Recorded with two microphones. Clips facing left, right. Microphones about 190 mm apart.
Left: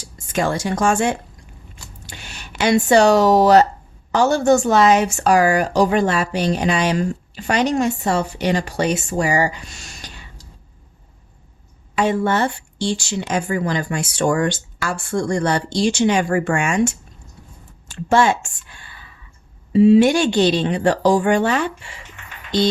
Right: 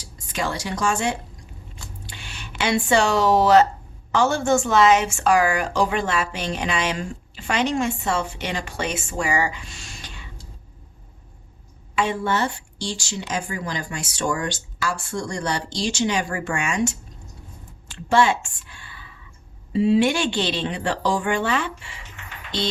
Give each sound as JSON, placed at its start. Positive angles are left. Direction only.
{"t": 0.0, "sound": "a woman's voice", "side_deg": 50}
{"t": 11.9, "sound": "speech", "side_deg": 45}